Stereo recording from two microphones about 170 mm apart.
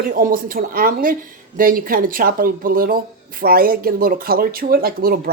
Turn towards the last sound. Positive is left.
turn(degrees=-60)  # may be behind; listen again after turning